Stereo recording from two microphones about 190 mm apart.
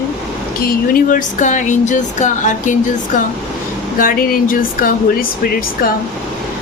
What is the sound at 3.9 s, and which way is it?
A woman's voice, 50° left (ahead or behind).